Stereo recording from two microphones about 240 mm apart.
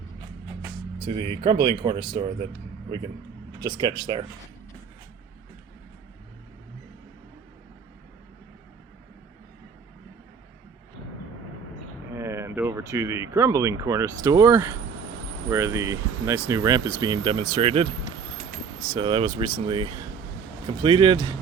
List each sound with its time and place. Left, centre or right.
1.3 s speech: centre
3.6 s speech: centre
12.1 s speech: centre
18.9 s speech: right